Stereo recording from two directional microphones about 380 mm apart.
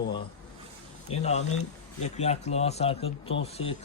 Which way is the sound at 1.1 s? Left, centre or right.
Centre.